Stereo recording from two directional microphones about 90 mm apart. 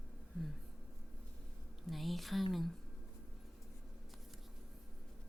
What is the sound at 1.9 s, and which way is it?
Speech, centre (ahead or behind).